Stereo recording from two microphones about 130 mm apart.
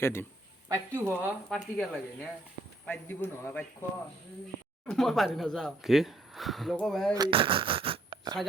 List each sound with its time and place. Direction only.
0.0 s speech: 20° left (ahead or behind)
0.7 s a woman's voice: 20° right (ahead or behind)
1.5 s a man's voice: 5° left (ahead or behind)
4.9 s speech: centre (ahead or behind)
7.3 s speech: 40° right (ahead or behind)